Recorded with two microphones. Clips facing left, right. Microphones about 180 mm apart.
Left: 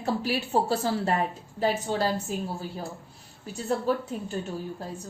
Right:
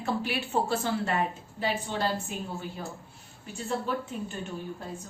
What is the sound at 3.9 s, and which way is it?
Speech, 40° left (ahead or behind).